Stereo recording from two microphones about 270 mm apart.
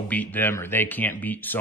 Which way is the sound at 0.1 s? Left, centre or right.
Centre.